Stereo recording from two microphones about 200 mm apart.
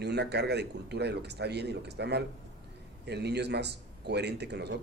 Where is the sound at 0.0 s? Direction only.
55° right (ahead or behind).